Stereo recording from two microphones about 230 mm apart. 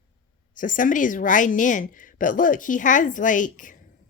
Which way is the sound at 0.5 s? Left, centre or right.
Left.